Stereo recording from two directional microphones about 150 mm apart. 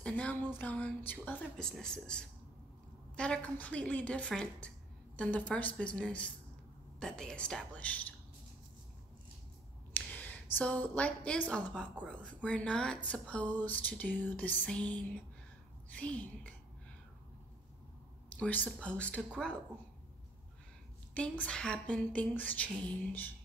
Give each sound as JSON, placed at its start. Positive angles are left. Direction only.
{"t": 0.0, "sound": "speech", "side_deg": 10}
{"t": 9.9, "sound": "a woman's voice", "side_deg": 15}
{"t": 18.3, "sound": "speech", "side_deg": 10}
{"t": 21.1, "sound": "speech", "side_deg": 10}